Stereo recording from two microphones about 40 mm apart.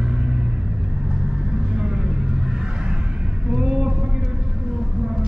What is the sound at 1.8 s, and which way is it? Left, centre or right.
Vehicle, centre.